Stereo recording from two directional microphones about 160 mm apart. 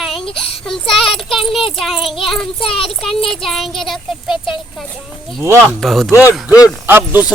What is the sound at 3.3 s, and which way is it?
A child's voice, centre (ahead or behind).